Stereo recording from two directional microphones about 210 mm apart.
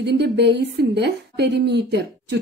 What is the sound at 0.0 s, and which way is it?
A woman's voice, 55° right (ahead or behind).